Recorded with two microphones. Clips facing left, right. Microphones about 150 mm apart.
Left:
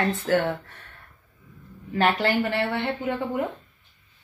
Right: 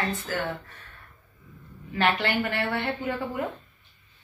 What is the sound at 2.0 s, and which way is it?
Speech, 40° left (ahead or behind).